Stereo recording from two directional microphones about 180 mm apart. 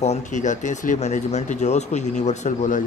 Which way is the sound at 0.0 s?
40° left (ahead or behind).